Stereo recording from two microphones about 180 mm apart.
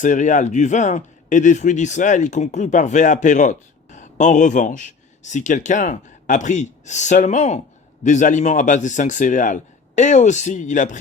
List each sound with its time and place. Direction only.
0.0 s a man's voice: 45° left (ahead or behind)